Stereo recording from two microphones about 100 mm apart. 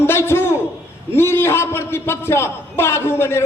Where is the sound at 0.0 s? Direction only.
25° left (ahead or behind).